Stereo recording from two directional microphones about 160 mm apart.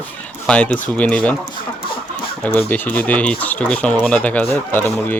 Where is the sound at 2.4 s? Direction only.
10° left (ahead or behind).